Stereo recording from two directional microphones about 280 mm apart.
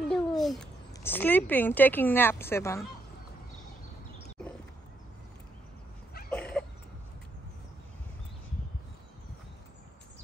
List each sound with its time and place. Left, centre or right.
0.1 s a child's voice: centre
6.3 s cough: centre